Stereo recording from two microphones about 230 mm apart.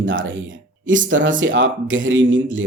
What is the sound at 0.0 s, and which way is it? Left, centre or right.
Speech, right.